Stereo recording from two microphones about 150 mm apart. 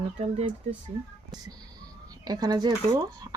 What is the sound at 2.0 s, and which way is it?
Speech, 25° right (ahead or behind).